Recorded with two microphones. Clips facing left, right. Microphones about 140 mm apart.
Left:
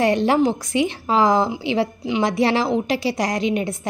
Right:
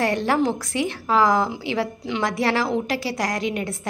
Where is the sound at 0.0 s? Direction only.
20° left (ahead or behind).